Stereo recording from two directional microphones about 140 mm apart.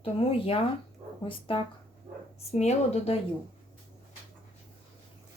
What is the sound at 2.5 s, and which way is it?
Speech, 50° left (ahead or behind).